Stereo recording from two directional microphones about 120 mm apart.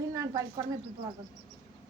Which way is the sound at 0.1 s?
30° right (ahead or behind).